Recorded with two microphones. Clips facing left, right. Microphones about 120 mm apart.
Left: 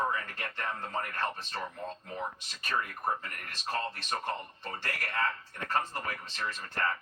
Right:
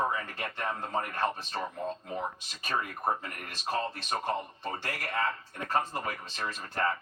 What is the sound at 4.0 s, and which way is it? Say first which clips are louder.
Speech: right 3 dB; 10° right (ahead or behind).